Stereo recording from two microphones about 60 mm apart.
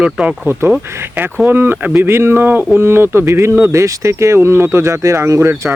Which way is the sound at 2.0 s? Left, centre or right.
Right.